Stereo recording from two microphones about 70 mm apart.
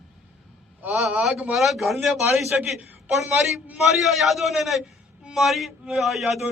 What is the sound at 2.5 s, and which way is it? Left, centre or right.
Speech, centre.